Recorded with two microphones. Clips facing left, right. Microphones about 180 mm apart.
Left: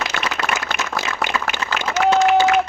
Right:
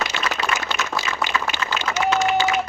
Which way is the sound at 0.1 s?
60° left (ahead or behind).